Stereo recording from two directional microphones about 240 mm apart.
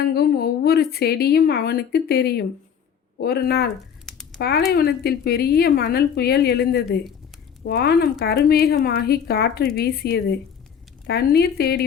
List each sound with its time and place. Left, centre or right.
0.1 s a woman's voice: left
4.0 s a sound: centre
4.4 s a woman's voice: left